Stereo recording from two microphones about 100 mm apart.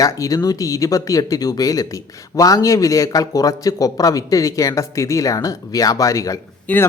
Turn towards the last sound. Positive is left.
turn(degrees=15)  # may be behind; listen again after turning